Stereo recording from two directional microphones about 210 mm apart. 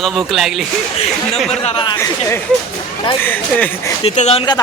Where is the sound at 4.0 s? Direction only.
30° left (ahead or behind).